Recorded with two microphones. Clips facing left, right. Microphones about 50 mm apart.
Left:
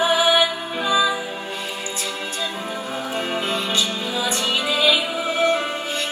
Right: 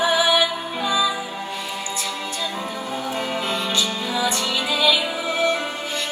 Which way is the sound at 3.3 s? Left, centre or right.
Left.